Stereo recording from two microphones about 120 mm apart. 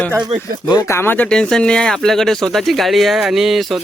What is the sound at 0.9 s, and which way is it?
Speech, 20° left (ahead or behind).